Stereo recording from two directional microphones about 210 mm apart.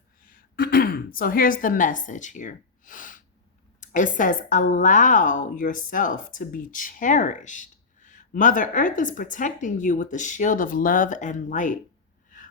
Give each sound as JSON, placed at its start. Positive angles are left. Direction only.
{"t": 0.3, "sound": "throat clearing", "side_deg": 45}
{"t": 3.8, "sound": "a woman's voice", "side_deg": 40}